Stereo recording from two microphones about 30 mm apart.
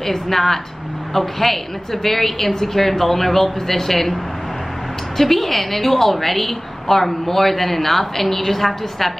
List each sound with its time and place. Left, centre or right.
0.0 s a woman's voice: centre